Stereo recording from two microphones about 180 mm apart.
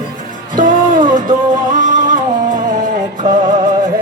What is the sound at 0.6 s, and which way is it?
Music, 50° right (ahead or behind).